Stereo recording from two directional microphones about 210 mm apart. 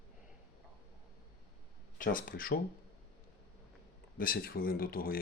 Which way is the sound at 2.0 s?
40° left (ahead or behind).